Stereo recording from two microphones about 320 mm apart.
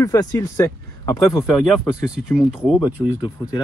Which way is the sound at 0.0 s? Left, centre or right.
Centre.